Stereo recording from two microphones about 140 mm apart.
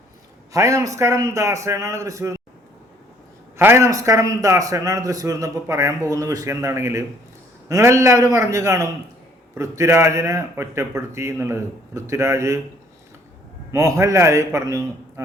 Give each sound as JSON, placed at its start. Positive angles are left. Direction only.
{"t": 0.5, "sound": "a man's voice", "side_deg": -25}
{"t": 3.6, "sound": "a man's voice", "side_deg": -20}
{"t": 13.7, "sound": "a man's voice", "side_deg": -20}